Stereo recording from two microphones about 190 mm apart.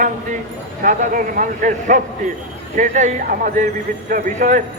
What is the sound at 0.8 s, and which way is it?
A man's voice, 45° right (ahead or behind).